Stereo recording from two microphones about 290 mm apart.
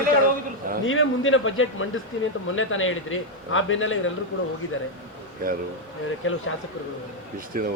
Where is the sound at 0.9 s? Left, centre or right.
Left.